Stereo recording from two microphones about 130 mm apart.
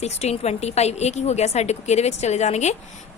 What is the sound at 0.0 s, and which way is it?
A woman's voice, 55° left (ahead or behind).